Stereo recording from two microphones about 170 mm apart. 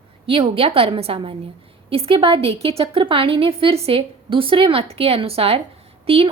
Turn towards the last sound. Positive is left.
turn(degrees=-35)  # may be behind; listen again after turning